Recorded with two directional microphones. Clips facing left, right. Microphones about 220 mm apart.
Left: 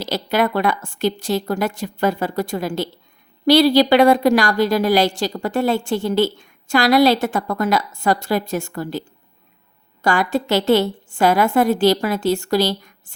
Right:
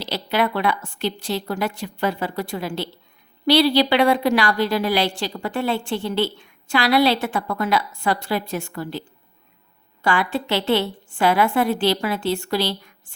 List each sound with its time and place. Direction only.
0.0 s a woman's voice: 45° left (ahead or behind)